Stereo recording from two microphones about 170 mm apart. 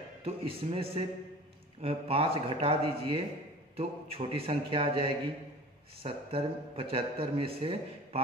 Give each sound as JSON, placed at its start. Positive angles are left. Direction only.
{"t": 0.2, "sound": "a man's voice", "side_deg": -35}